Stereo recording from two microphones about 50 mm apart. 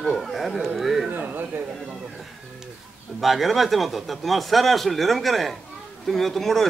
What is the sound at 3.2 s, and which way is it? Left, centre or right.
Speech, centre.